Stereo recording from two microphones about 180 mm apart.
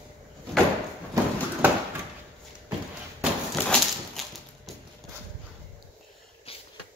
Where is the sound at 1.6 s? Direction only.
10° right (ahead or behind).